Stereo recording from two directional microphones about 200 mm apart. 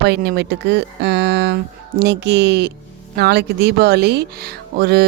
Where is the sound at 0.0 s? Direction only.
55° right (ahead or behind).